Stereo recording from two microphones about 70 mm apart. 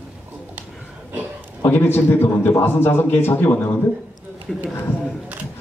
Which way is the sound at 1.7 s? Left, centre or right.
Left.